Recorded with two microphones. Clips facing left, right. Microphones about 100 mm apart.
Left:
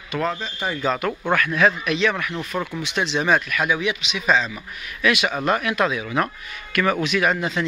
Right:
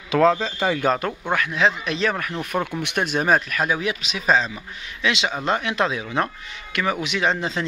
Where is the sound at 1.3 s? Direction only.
20° right (ahead or behind).